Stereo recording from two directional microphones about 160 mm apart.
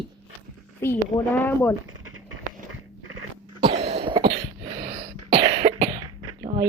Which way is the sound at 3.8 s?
35° right (ahead or behind).